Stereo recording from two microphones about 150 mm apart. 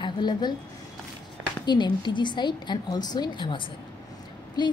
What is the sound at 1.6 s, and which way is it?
A woman's voice, 30° left (ahead or behind).